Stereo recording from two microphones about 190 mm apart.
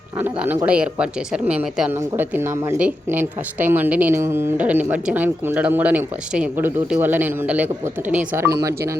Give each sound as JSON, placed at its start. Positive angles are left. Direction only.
{"t": 0.2, "sound": "speech", "side_deg": -10}